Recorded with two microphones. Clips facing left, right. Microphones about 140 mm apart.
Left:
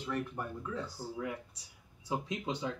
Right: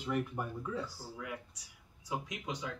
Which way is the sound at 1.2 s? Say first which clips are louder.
Left 4 dB; 30° left (ahead or behind).